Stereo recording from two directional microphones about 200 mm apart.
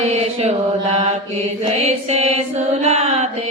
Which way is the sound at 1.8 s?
35° right (ahead or behind).